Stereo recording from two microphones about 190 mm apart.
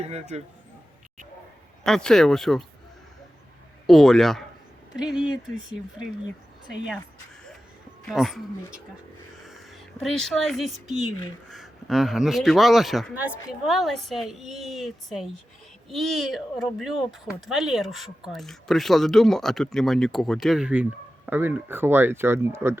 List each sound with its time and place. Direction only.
0.0 s speech: 35° right (ahead or behind)
1.8 s speech: 5° left (ahead or behind)
3.8 s speech: centre (ahead or behind)
5.5 s speech: 40° right (ahead or behind)
8.0 s speech: centre (ahead or behind)
10.0 s speech: centre (ahead or behind)